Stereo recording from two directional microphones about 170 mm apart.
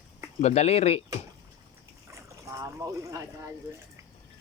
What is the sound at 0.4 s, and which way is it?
Speech, 40° left (ahead or behind).